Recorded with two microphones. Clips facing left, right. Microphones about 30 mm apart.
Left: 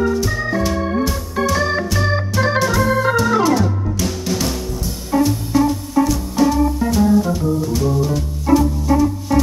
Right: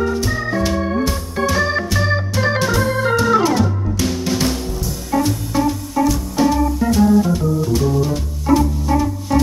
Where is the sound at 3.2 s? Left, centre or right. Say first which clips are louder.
Even; centre.